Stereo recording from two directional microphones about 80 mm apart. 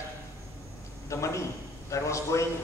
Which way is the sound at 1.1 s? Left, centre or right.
Left.